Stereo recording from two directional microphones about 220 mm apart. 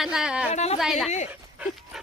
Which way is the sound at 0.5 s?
30° left (ahead or behind).